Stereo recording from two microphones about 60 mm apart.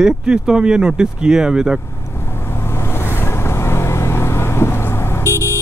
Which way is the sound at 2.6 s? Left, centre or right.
Left.